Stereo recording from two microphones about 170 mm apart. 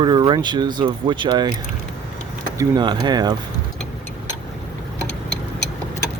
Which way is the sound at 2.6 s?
25° right (ahead or behind).